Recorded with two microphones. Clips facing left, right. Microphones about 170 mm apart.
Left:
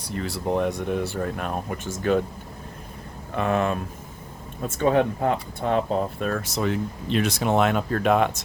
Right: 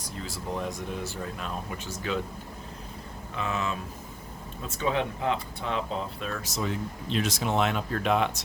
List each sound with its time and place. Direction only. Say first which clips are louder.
0.0 s speech: left 8 dB; 65° left (ahead or behind); by 2.2 s 50° left (ahead or behind)
3.3 s speech: left 8 dB; 55° left (ahead or behind)